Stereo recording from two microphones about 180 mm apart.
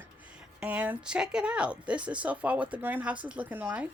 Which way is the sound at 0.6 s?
10° right (ahead or behind).